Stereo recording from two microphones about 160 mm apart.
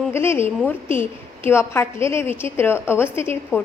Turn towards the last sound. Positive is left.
turn(degrees=15)  # may be behind; listen again after turning